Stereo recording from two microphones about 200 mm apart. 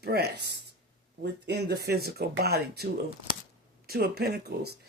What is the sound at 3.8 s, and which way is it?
Speech, 50° right (ahead or behind).